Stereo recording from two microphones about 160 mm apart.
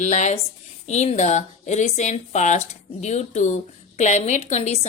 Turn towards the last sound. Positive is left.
turn(degrees=45)  # may be behind; listen again after turning